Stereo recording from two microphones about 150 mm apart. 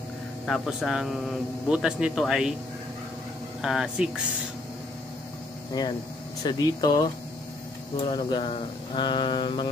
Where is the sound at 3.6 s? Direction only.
5° right (ahead or behind).